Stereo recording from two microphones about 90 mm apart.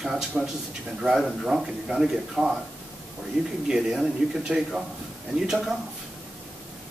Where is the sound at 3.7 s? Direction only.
5° right (ahead or behind).